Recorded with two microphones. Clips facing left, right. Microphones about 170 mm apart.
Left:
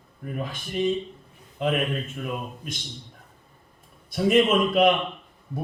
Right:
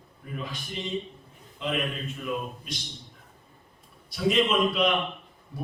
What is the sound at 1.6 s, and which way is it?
Speech, 50° left (ahead or behind).